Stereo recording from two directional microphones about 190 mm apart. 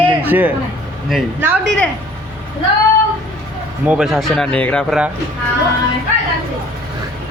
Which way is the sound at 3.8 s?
5° right (ahead or behind).